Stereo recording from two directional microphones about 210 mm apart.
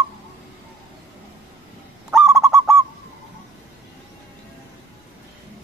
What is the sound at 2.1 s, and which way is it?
Goose, 5° right (ahead or behind).